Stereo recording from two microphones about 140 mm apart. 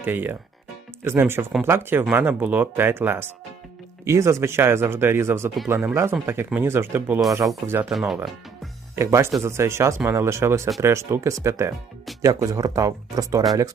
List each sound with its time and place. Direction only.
0.0 s speech: 15° right (ahead or behind)
9.0 s speech: 20° right (ahead or behind)